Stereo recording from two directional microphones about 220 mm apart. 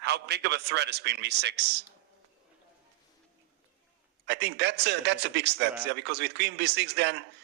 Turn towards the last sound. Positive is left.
turn(degrees=-50)  # may be behind; listen again after turning